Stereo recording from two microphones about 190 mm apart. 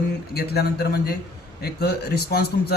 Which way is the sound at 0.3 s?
55° left (ahead or behind).